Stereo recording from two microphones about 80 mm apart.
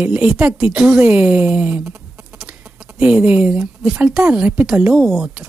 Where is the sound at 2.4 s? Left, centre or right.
Centre.